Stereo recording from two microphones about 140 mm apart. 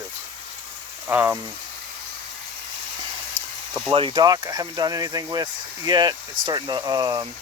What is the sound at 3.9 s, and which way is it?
Speech, 35° right (ahead or behind).